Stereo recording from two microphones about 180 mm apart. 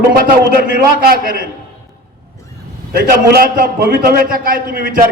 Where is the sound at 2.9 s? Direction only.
55° right (ahead or behind).